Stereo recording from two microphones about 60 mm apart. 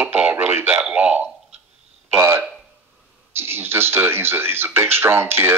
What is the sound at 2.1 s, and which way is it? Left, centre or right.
Speech, right.